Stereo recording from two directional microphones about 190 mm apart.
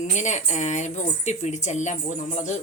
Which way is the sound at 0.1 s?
40° left (ahead or behind).